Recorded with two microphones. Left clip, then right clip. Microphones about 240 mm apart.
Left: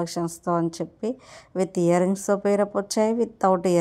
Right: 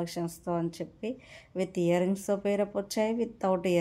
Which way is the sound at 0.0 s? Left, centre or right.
Left.